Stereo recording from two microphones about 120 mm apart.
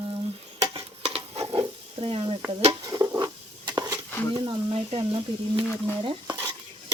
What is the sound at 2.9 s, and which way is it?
Stir, 25° right (ahead or behind).